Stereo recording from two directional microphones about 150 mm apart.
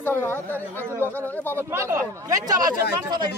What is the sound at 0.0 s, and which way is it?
Speech, 15° left (ahead or behind).